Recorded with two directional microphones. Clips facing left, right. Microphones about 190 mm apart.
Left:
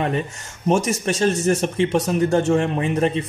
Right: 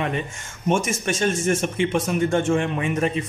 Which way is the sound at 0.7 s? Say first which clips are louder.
Left 3 dB; 35° left (ahead or behind).